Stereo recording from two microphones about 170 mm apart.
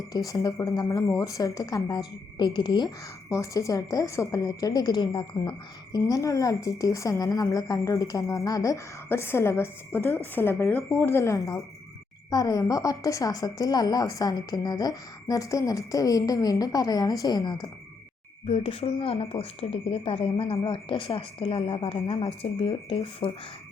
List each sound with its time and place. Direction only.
0.1 s a woman's voice: 20° left (ahead or behind)
18.4 s speech: 35° left (ahead or behind)